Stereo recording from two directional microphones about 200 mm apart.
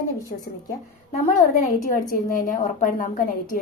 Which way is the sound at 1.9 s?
40° left (ahead or behind).